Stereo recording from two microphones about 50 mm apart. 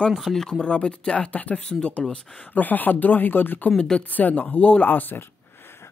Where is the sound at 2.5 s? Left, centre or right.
Left.